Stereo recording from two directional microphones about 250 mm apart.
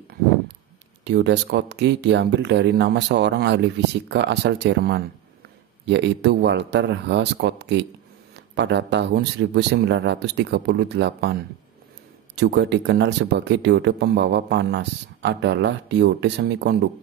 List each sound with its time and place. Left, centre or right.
1.0 s speech: right
12.4 s speech: right